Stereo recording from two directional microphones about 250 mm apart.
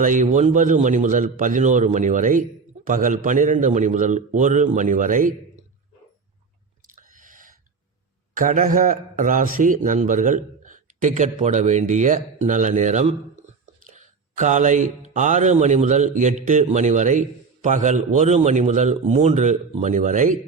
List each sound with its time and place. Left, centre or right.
0.0 s a man's voice: right
6.8 s a sound: right
8.4 s a man's voice: right